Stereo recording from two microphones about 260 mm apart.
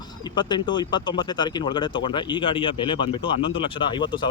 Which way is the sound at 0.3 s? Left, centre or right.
Centre.